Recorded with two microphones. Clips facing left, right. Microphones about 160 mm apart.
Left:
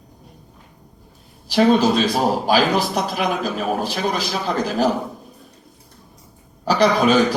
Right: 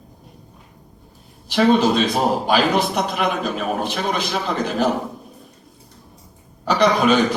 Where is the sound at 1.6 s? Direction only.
Centre (ahead or behind).